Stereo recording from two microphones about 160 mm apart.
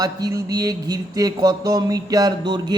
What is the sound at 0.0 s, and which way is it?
Mantra, 25° right (ahead or behind).